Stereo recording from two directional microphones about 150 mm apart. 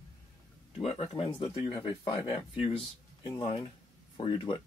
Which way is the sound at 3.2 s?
35° left (ahead or behind).